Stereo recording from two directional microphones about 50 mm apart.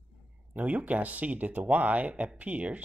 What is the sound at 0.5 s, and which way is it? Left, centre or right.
Speech, right.